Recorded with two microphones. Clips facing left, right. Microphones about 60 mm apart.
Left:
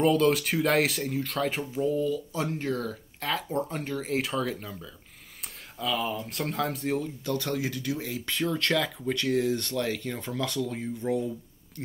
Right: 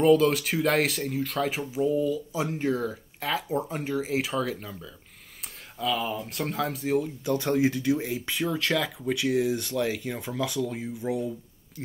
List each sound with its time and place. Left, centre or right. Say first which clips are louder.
0.0 s speech: right 2 dB; centre
7.2 s speech: right 6 dB; right; by 11.8 s centre